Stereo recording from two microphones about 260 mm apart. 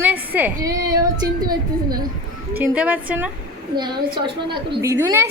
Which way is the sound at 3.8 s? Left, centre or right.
Centre.